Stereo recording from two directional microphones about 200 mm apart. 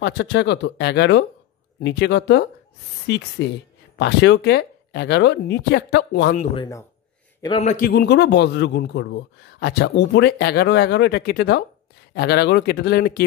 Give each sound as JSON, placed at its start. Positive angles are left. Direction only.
{"t": 0.0, "sound": "a man's voice", "side_deg": 60}
{"t": 6.5, "sound": "speech", "side_deg": 20}
{"t": 7.6, "sound": "a man's voice", "side_deg": 45}